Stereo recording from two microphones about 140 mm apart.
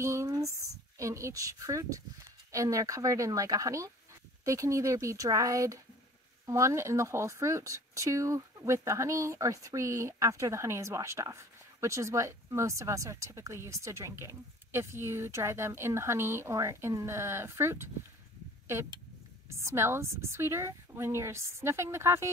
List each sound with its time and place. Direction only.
0.0 s a sound: 20° right (ahead or behind)
2.5 s speech: 25° right (ahead or behind)
19.5 s speech: 20° right (ahead or behind)